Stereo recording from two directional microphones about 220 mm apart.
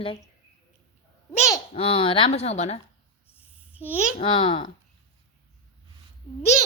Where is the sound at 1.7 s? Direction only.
25° left (ahead or behind).